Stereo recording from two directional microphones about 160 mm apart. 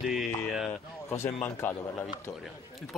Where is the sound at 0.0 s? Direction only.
Centre (ahead or behind).